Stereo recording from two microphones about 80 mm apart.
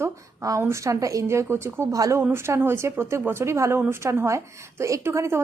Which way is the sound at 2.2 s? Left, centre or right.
Right.